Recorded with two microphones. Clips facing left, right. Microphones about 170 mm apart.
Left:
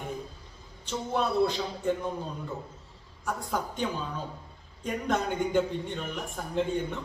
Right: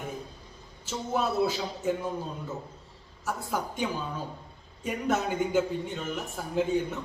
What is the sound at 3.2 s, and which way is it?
A woman's voice, 5° right (ahead or behind).